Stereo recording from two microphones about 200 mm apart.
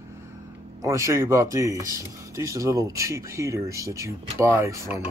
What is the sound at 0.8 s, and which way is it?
Speech, 15° right (ahead or behind).